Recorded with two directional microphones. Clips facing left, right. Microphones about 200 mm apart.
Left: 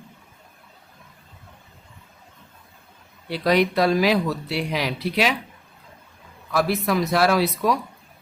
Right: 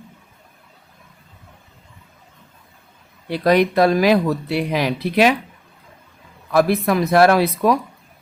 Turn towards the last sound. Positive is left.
turn(degrees=-55)  # may be behind; listen again after turning